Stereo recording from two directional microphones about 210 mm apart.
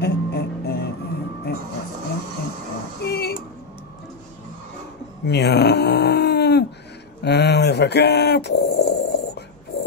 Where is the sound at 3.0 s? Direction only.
50° left (ahead or behind).